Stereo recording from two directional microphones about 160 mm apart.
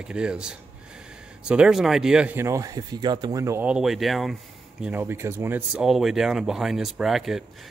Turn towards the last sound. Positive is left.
turn(degrees=0)  # may be behind; listen again after turning